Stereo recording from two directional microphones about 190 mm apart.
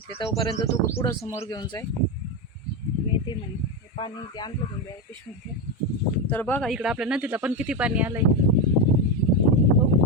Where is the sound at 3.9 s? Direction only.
25° left (ahead or behind).